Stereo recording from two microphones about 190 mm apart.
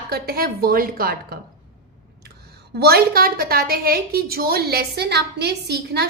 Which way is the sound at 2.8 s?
55° right (ahead or behind).